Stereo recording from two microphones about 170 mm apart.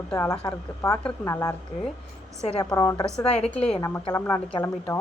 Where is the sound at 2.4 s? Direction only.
35° left (ahead or behind).